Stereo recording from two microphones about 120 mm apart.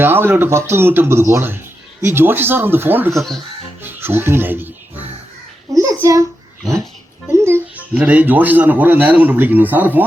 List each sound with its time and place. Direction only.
0.0 s a man's voice: 20° right (ahead or behind)
3.1 s speech: centre (ahead or behind)
3.8 s speech: 20° right (ahead or behind)
5.7 s a sound: 30° right (ahead or behind)
7.3 s music: 20° right (ahead or behind)
7.9 s a man's voice: 10° right (ahead or behind)